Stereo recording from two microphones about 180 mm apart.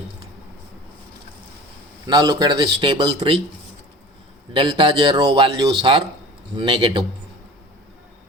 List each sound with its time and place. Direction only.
2.0 s a man's voice: 25° right (ahead or behind)
4.5 s a man's voice: 30° right (ahead or behind)